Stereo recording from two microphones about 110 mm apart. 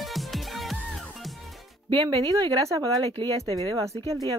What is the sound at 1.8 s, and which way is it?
Speech, 45° right (ahead or behind).